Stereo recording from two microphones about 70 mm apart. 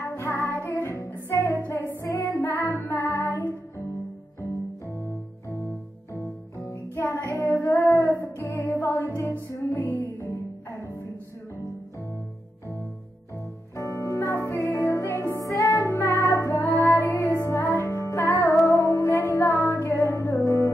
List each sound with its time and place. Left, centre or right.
0.0 s music: left
2.0 s music: left
2.7 s music: left
6.7 s music: left
7.2 s music: left
13.7 s music: left